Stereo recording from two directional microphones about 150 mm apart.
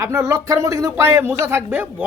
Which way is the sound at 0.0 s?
20° right (ahead or behind).